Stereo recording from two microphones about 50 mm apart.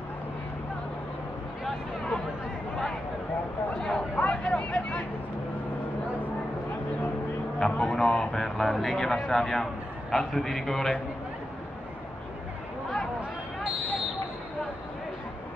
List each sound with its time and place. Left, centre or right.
3.7 s a sound: centre
4.2 s vehicle: left
7.6 s a man's voice: centre